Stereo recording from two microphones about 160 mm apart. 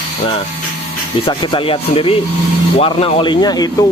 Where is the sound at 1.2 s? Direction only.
30° left (ahead or behind).